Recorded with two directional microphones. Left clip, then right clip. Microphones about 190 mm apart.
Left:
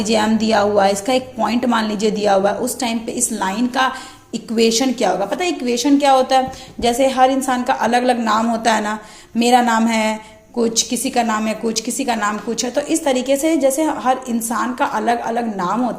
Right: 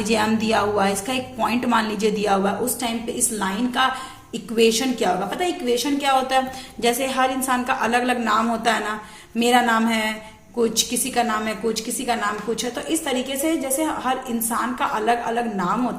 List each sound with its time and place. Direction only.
0.0 s a woman's voice: 20° left (ahead or behind)